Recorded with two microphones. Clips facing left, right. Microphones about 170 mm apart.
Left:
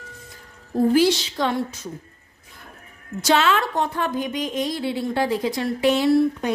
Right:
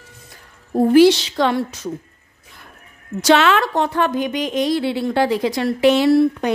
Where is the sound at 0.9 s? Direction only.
70° right (ahead or behind).